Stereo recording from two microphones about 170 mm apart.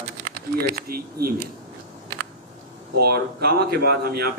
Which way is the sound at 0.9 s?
60° right (ahead or behind).